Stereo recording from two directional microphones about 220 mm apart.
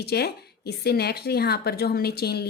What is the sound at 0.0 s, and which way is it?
Speech, 45° left (ahead or behind).